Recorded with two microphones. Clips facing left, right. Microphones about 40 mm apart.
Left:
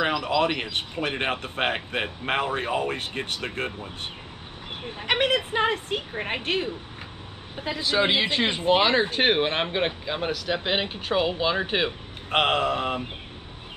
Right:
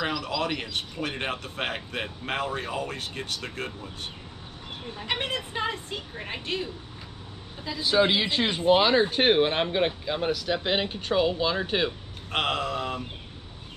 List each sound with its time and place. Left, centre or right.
0.0 s speech: left
5.0 s a woman's voice: left
7.9 s speech: left